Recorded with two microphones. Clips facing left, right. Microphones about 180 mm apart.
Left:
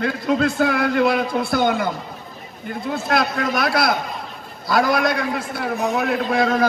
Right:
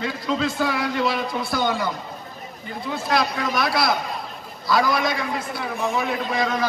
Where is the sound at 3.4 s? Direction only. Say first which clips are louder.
Left 3 dB; 55° left (ahead or behind).